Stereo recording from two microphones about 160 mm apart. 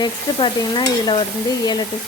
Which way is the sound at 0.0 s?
30° left (ahead or behind).